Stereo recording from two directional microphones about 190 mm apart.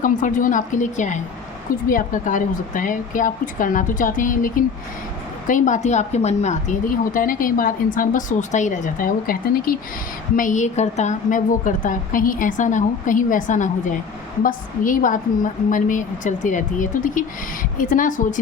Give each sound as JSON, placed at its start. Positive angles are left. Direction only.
{"t": 0.0, "sound": "speech", "side_deg": 45}